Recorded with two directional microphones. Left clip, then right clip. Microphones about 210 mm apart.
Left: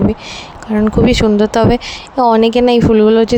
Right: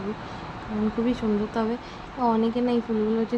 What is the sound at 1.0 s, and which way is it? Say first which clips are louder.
Speech: left 15 dB; 55° left (ahead or behind).